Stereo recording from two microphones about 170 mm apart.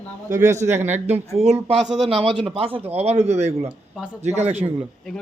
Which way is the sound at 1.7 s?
Centre (ahead or behind).